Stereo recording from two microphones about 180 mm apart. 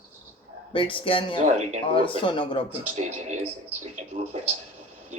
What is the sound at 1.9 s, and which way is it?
Speech, 30° left (ahead or behind).